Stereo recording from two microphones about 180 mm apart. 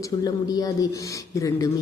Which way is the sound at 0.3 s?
20° left (ahead or behind).